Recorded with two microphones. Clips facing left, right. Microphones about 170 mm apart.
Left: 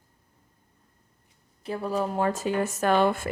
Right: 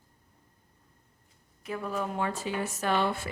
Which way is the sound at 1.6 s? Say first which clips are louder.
Left 5 dB; 30° left (ahead or behind).